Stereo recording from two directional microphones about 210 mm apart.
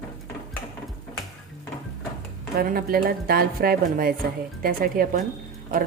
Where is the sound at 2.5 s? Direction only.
45° right (ahead or behind).